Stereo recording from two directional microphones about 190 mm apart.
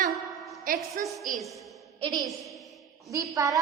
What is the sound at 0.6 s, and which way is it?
Speech, 45° right (ahead or behind).